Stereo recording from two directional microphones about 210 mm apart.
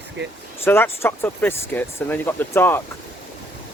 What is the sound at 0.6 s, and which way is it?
Speech, 10° left (ahead or behind).